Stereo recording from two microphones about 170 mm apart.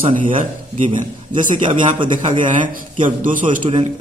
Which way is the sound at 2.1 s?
50° right (ahead or behind).